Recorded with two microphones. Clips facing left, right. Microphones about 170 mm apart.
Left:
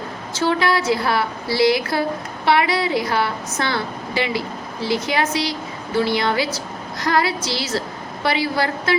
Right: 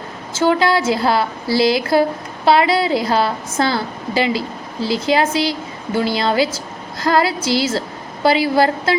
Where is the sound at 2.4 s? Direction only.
25° right (ahead or behind).